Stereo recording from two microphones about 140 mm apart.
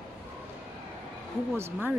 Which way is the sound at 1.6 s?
15° right (ahead or behind).